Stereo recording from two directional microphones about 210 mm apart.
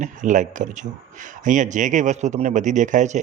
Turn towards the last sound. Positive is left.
turn(degrees=-35)  # may be behind; listen again after turning